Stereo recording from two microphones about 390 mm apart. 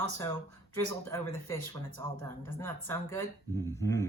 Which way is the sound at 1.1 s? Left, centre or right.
Centre.